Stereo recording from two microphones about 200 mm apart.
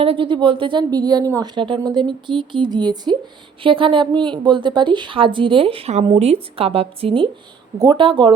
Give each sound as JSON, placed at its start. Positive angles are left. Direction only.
{"t": 0.0, "sound": "a woman's voice", "side_deg": -25}